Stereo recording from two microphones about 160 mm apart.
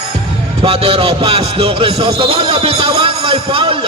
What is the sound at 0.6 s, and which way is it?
A man's voice, 35° right (ahead or behind).